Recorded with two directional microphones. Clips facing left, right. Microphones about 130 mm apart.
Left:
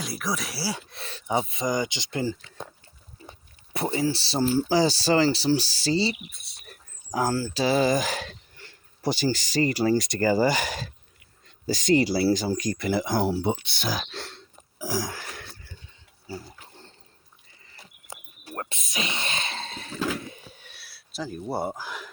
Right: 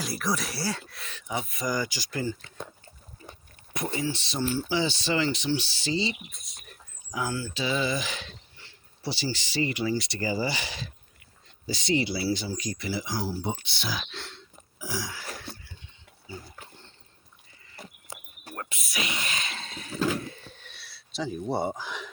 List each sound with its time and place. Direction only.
0.0 s speech: centre (ahead or behind)
0.9 s speech: 30° left (ahead or behind)
3.2 s a sound: 45° right (ahead or behind)
3.9 s speech: 35° left (ahead or behind)
17.8 s horse: 50° right (ahead or behind)
18.5 s speech: 30° left (ahead or behind)
20.2 s a sound: 15° left (ahead or behind)